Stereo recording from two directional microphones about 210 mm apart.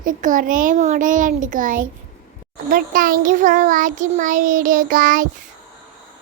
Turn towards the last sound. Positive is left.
turn(degrees=-40)  # may be behind; listen again after turning